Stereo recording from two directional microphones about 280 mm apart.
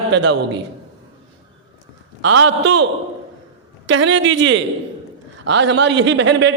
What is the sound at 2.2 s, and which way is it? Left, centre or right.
A man's voice, right.